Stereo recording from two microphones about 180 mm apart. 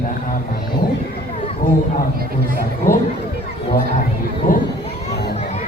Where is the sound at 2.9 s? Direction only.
15° left (ahead or behind).